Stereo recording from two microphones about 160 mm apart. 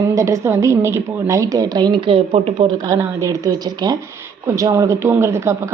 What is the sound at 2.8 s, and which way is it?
A woman's voice, 20° right (ahead or behind).